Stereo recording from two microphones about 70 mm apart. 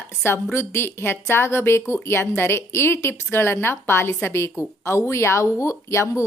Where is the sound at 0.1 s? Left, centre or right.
Left.